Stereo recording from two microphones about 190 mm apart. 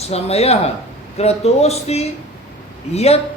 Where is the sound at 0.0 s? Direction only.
35° left (ahead or behind).